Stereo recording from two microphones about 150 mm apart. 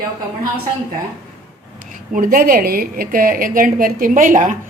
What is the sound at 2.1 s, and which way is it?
A woman's voice, 65° right (ahead or behind).